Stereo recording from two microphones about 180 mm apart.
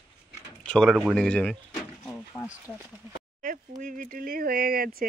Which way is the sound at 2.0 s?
10° left (ahead or behind).